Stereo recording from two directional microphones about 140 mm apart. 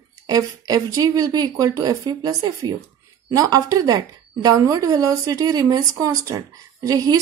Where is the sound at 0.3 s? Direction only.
25° right (ahead or behind).